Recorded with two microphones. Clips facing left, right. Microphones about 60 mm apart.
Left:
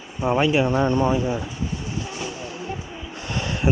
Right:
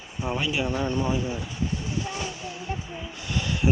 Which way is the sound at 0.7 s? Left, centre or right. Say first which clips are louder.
Left 6 dB; left.